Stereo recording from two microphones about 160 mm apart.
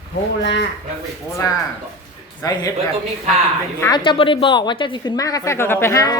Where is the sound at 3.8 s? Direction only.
30° left (ahead or behind).